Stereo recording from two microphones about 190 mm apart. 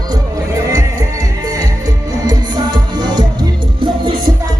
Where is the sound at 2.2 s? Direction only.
20° right (ahead or behind).